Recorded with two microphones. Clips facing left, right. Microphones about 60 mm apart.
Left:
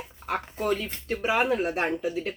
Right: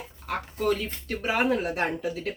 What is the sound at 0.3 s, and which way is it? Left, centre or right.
Speech, centre.